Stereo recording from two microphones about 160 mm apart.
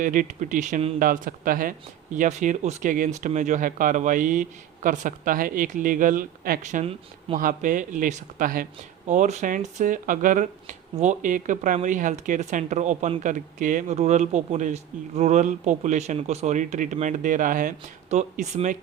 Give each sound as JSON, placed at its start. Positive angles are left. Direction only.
{"t": 0.0, "sound": "speech", "side_deg": -55}
{"t": 9.0, "sound": "speech", "side_deg": -50}